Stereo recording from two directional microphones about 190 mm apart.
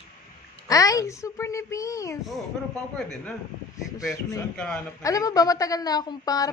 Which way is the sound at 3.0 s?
5° left (ahead or behind).